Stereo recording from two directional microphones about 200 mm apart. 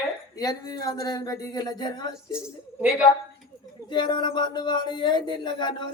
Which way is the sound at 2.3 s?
5° right (ahead or behind).